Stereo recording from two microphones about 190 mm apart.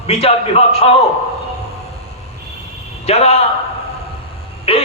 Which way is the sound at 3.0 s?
35° left (ahead or behind).